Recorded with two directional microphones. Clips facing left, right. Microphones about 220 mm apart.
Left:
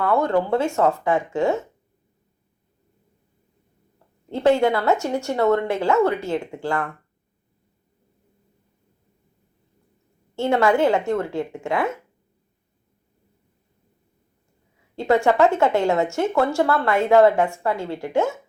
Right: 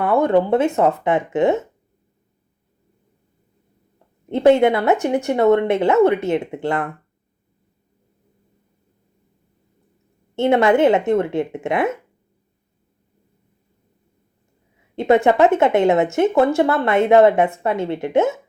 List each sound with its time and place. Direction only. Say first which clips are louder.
0.0 s speech: right 4 dB; 20° right (ahead or behind)
4.3 s speech: right 4 dB; 20° right (ahead or behind)
10.3 s speech: right 4 dB; 20° right (ahead or behind)
14.9 s speech: right 3 dB; 20° right (ahead or behind)